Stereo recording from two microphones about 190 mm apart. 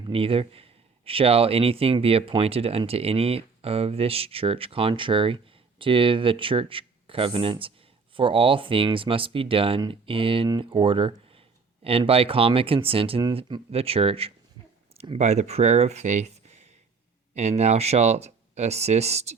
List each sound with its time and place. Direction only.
0.0 s speech: 30° right (ahead or behind)